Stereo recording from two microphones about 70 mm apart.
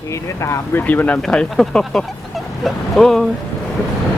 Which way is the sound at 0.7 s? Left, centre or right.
Left.